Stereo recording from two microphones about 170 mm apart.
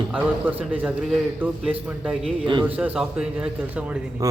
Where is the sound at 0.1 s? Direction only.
10° right (ahead or behind).